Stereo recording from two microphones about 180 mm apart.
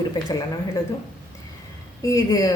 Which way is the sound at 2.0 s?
20° left (ahead or behind).